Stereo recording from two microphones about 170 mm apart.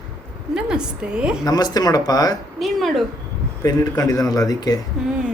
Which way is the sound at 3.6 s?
20° left (ahead or behind).